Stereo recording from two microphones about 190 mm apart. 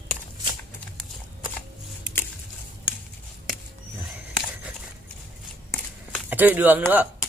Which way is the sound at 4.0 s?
5° right (ahead or behind).